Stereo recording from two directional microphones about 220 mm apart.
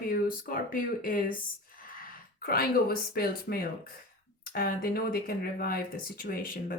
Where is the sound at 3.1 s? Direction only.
45° left (ahead or behind).